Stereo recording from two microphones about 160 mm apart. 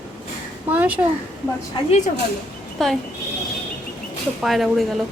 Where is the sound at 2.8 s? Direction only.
5° left (ahead or behind).